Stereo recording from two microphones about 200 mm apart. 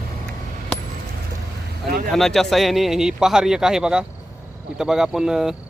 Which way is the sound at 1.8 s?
50° right (ahead or behind).